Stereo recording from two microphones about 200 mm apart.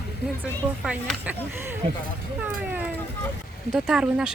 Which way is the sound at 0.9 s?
5° right (ahead or behind).